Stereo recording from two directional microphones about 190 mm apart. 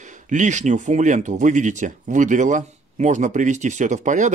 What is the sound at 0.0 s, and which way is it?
Speech, 40° right (ahead or behind).